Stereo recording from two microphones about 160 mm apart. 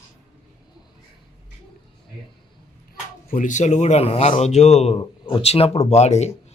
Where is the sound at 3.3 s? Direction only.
50° left (ahead or behind).